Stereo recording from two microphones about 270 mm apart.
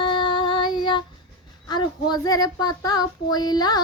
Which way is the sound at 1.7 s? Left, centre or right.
Centre.